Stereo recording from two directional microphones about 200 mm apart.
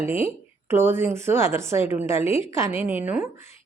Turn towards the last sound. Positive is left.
turn(degrees=-10)  # may be behind; listen again after turning